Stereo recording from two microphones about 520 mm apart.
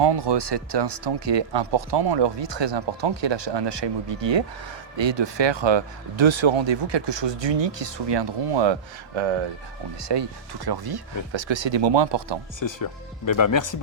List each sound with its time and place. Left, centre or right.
0.0 s speech: right
10.0 s speech: right
12.5 s speech: left